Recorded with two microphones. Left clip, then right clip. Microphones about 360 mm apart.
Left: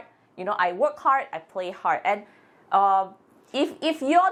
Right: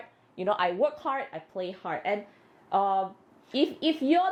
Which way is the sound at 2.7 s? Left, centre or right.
Left.